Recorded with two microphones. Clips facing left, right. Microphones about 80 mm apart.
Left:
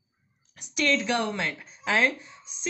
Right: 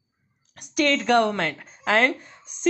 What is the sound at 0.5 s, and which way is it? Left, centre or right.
Speech, right.